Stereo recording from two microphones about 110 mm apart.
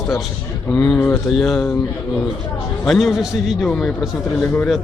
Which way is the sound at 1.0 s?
20° left (ahead or behind).